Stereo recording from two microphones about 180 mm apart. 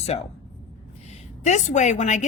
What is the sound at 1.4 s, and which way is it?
Speech, 40° left (ahead or behind).